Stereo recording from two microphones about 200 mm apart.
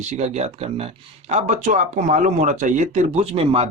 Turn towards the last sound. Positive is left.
turn(degrees=-30)  # may be behind; listen again after turning